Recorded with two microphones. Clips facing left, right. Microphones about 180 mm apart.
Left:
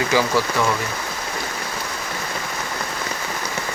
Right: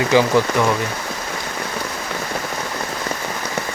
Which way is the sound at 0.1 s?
20° right (ahead or behind).